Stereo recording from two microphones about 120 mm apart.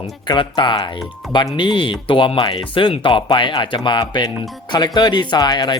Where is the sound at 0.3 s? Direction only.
40° left (ahead or behind).